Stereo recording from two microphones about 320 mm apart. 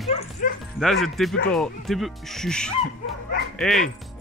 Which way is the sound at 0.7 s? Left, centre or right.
Centre.